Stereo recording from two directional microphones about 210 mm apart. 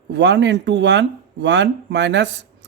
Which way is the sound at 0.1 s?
55° right (ahead or behind).